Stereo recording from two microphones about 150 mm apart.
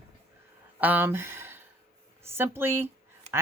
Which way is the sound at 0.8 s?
10° right (ahead or behind).